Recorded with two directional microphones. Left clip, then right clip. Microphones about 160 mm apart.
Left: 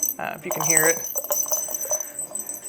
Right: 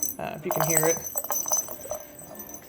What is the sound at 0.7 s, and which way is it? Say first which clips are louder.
Speech: left 6 dB; 10° right (ahead or behind).